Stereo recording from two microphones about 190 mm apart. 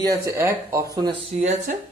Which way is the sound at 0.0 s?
15° right (ahead or behind).